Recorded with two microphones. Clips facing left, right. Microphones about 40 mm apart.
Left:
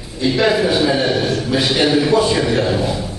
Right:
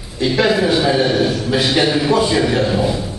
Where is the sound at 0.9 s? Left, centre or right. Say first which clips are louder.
Right 1 dB; centre.